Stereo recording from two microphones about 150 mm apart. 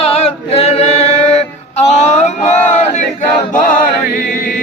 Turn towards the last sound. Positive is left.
turn(degrees=60)  # may be behind; listen again after turning